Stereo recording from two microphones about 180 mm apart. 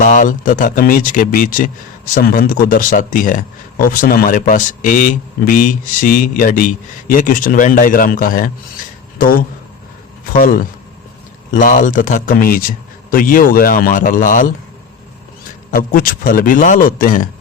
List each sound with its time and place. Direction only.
0.0 s speech: 45° left (ahead or behind)
15.7 s speech: 50° left (ahead or behind)